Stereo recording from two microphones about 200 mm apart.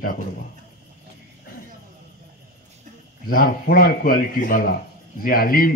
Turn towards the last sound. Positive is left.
turn(degrees=45)  # may be behind; listen again after turning